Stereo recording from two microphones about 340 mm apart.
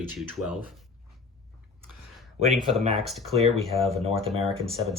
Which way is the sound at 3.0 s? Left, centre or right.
Centre.